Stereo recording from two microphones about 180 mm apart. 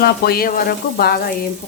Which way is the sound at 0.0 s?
55° left (ahead or behind).